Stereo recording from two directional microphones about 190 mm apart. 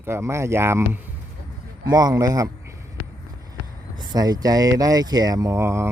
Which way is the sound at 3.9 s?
20° right (ahead or behind).